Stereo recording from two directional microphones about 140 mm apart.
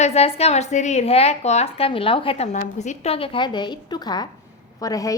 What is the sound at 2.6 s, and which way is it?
A woman's voice, 55° left (ahead or behind).